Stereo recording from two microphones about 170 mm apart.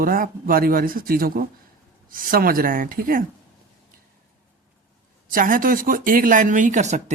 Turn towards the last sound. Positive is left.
turn(degrees=-45)  # may be behind; listen again after turning